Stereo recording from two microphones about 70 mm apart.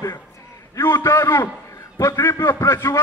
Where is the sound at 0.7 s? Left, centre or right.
Left.